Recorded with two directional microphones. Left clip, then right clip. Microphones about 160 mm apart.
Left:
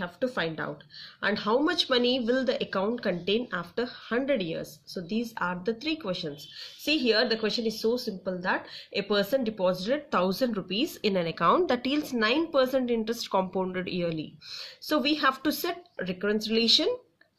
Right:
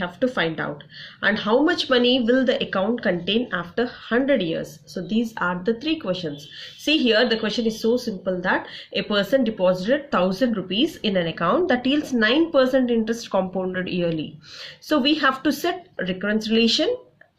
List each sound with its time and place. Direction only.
0.0 s speech: 30° left (ahead or behind)